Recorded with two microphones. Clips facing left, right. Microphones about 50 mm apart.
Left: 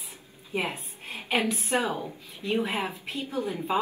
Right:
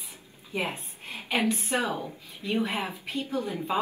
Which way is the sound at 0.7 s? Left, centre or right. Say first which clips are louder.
Even; left.